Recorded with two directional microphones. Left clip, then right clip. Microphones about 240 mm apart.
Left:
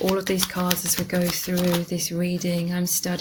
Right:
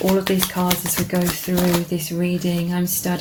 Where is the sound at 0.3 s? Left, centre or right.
Left.